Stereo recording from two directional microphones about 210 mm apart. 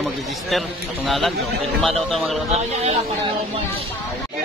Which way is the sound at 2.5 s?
30° right (ahead or behind).